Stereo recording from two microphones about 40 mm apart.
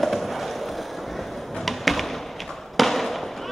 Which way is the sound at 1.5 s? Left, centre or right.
Centre.